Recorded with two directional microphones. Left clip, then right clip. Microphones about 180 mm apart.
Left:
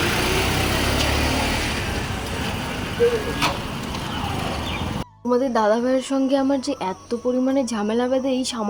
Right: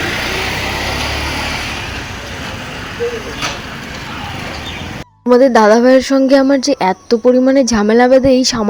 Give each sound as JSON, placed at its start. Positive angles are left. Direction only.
{"t": 5.3, "sound": "speech", "side_deg": -40}